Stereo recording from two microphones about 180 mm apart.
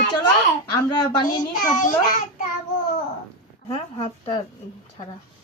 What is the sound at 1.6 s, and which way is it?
Speech, 45° left (ahead or behind).